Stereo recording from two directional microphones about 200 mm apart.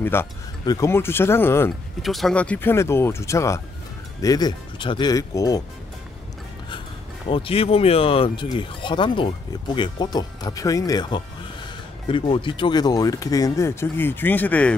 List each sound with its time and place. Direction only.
0.0 s speech: 10° left (ahead or behind)
2.0 s speech: centre (ahead or behind); by 5.6 s 15° left (ahead or behind)
7.2 s speech: 25° left (ahead or behind); by 14.8 s 5° left (ahead or behind)